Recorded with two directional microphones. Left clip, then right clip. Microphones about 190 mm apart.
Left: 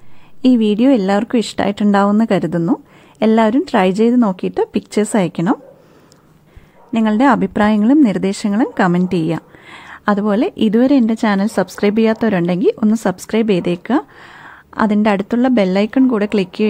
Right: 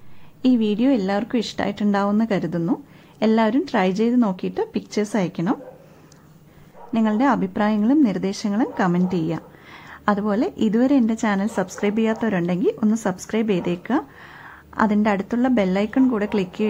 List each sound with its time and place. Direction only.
0.4 s a woman's voice: 35° left (ahead or behind)
6.9 s a woman's voice: 30° left (ahead or behind)